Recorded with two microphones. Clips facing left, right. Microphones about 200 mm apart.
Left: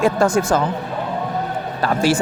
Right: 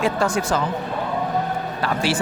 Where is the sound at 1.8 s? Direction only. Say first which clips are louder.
Left 6 dB; 45° left (ahead or behind).